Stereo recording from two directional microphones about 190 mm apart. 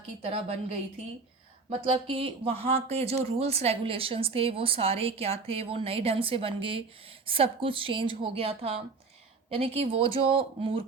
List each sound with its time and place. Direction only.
0.2 s a woman's voice: 30° right (ahead or behind)
1.8 s speech: 30° right (ahead or behind)